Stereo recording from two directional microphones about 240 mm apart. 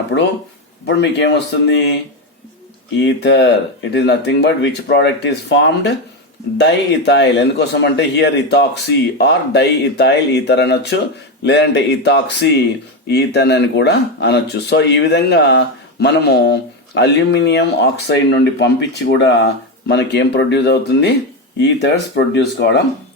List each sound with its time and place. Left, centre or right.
0.9 s speech: left
3.0 s speech: left